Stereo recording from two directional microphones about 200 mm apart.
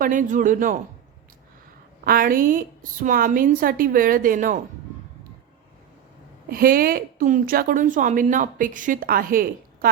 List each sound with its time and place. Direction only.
0.0 s a man's voice: 40° right (ahead or behind)
2.0 s a woman's voice: 45° right (ahead or behind)
6.5 s a woman's voice: 45° right (ahead or behind)